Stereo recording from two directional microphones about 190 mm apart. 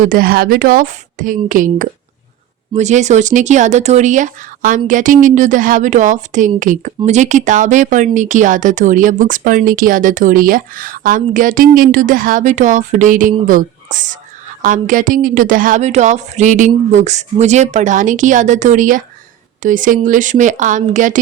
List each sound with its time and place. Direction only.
0.0 s a woman's voice: 50° right (ahead or behind)